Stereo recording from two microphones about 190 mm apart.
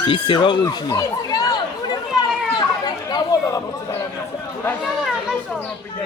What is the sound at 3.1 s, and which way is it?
Chatter, 20° left (ahead or behind).